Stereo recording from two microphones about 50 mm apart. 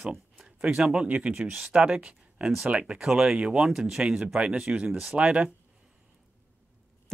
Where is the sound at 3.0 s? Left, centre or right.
Centre.